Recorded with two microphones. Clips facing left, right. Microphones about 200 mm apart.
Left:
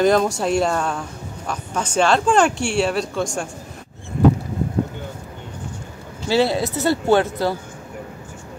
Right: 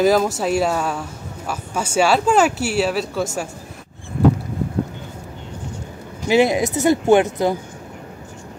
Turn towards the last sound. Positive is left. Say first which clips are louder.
# right 3 dB
turn(degrees=-15)  # may be behind; listen again after turning